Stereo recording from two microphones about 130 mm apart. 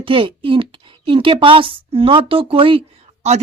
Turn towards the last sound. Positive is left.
turn(degrees=-50)  # may be behind; listen again after turning